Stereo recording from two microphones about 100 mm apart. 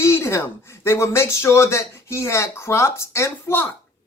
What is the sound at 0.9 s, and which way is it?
A man's voice, 25° left (ahead or behind).